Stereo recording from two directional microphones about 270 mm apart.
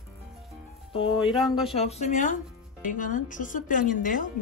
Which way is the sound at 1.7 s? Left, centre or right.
Left.